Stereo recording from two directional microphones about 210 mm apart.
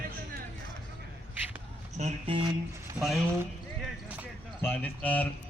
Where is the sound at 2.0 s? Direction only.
30° right (ahead or behind).